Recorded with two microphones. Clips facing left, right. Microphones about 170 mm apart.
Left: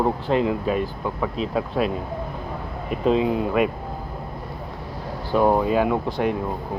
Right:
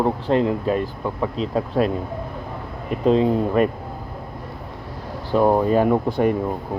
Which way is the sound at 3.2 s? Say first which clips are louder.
Right 3 dB; 35° right (ahead or behind).